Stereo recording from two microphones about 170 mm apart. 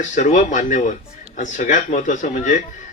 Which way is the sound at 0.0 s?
45° left (ahead or behind).